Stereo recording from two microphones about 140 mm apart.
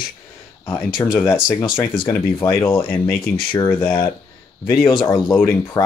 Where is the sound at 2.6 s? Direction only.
35° left (ahead or behind).